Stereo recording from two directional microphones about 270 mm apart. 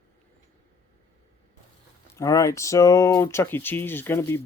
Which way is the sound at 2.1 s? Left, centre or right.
Centre.